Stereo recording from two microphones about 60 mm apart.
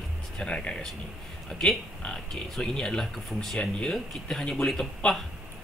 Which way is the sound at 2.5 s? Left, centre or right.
Centre.